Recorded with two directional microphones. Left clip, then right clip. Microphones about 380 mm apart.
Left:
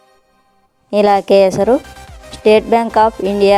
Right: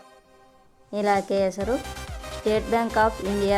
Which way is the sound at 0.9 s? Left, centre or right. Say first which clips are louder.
Left 12 dB; centre.